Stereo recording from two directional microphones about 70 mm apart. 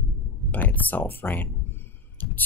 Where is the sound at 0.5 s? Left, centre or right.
Left.